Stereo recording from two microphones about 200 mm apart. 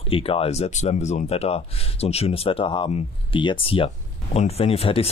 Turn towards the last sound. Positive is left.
turn(degrees=30)  # may be behind; listen again after turning